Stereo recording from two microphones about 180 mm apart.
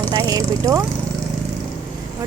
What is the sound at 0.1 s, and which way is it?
Speech, 20° right (ahead or behind).